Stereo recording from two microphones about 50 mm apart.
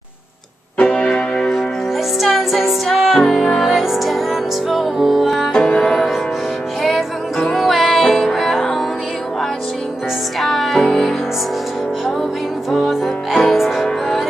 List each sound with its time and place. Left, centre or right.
0.7 s music: left
2.2 s music: centre
5.5 s music: centre
10.4 s music: centre
12.7 s music: centre